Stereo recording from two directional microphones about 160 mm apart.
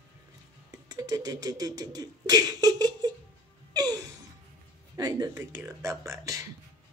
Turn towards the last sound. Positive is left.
turn(degrees=-20)  # may be behind; listen again after turning